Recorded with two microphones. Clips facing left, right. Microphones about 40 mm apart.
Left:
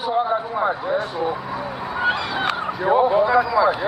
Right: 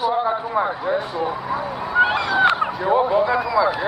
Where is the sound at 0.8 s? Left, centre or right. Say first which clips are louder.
Even; centre.